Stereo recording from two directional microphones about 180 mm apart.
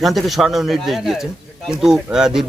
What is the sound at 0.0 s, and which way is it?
Speech, centre (ahead or behind).